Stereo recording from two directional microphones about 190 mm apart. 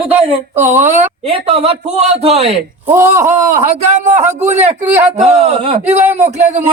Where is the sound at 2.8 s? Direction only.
15° right (ahead or behind).